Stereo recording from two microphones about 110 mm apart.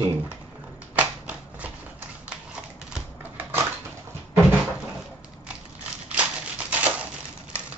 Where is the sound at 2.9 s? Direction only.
15° right (ahead or behind).